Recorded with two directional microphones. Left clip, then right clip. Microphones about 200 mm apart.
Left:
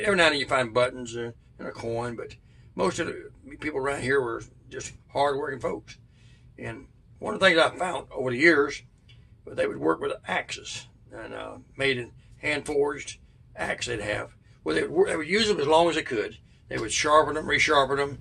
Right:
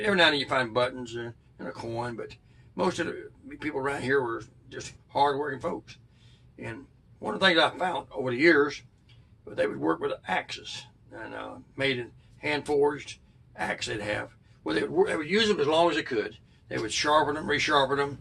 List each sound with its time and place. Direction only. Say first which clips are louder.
0.0 s a man's voice: left 1 dB; 20° left (ahead or behind)
7.2 s a man's voice: left 2 dB; 20° left (ahead or behind)